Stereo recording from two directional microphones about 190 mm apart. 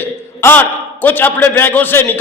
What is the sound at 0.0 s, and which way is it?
A man's voice, 10° left (ahead or behind).